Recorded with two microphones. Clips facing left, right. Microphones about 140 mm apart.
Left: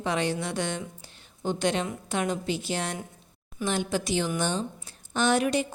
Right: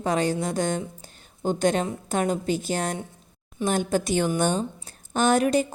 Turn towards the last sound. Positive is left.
turn(degrees=-45)  # may be behind; listen again after turning